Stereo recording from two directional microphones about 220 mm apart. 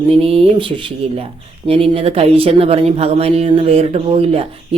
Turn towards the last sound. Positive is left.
turn(degrees=-25)  # may be behind; listen again after turning